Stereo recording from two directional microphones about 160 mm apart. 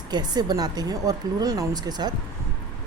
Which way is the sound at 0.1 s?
25° right (ahead or behind).